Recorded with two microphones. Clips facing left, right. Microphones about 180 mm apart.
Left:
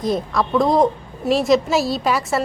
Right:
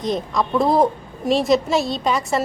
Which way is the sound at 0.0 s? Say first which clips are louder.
Left 1 dB; 5° left (ahead or behind).